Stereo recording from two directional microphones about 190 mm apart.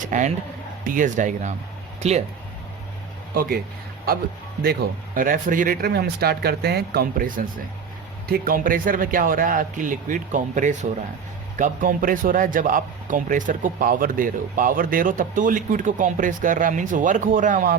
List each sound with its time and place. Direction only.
0.0 s speech: 40° right (ahead or behind)
3.3 s a man's voice: 50° right (ahead or behind)
4.6 s a man's voice: 50° right (ahead or behind)